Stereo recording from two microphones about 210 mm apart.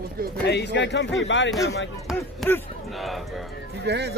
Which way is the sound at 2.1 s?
5° right (ahead or behind).